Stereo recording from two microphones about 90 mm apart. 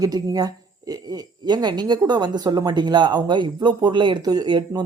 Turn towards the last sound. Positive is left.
turn(degrees=-50)  # may be behind; listen again after turning